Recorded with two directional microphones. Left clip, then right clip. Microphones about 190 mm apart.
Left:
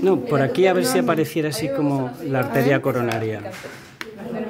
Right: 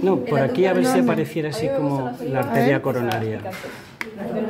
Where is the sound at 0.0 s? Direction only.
30° left (ahead or behind).